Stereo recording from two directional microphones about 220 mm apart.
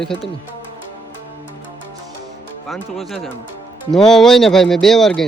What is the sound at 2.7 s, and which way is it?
Speech, centre (ahead or behind).